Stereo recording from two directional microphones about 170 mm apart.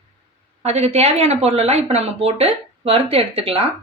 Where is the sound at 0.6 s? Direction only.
40° right (ahead or behind).